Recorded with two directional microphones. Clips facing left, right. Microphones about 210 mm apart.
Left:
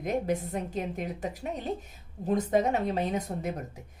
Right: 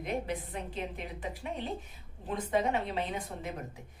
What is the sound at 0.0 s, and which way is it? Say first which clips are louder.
A woman's voice: left 6 dB; 45° left (ahead or behind).